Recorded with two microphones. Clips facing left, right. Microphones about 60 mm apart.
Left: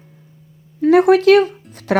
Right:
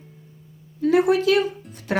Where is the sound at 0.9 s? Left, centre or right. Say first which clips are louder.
Left 8 dB; left.